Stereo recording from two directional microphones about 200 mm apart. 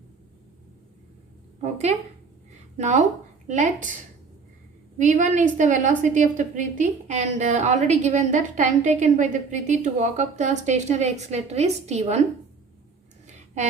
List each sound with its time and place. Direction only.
1.6 s a woman's voice: 35° right (ahead or behind)
4.9 s a woman's voice: 40° right (ahead or behind)